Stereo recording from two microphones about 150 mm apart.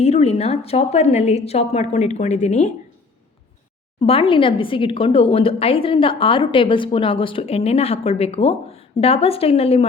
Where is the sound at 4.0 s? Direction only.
35° left (ahead or behind).